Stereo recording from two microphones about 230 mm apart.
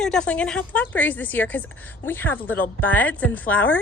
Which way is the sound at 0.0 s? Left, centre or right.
Centre.